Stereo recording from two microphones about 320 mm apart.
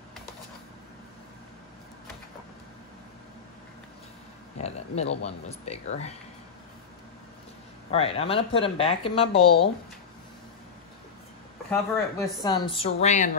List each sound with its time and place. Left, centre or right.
4.6 s speech: centre
7.9 s speech: centre
11.7 s speech: centre